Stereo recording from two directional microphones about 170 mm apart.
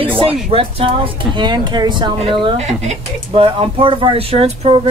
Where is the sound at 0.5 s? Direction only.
35° right (ahead or behind).